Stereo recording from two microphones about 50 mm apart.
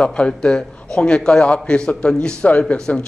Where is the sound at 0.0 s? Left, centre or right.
Left.